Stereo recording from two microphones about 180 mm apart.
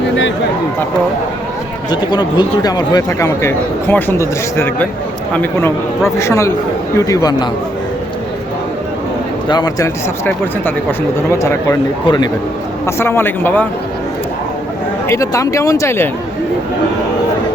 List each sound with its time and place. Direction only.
1.9 s speech: 25° left (ahead or behind)
9.5 s speech: 20° left (ahead or behind)
12.8 s speech: 15° left (ahead or behind)
15.0 s speech: 15° left (ahead or behind)